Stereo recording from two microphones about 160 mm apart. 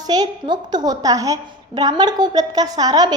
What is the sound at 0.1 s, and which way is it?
A woman's voice, 25° right (ahead or behind).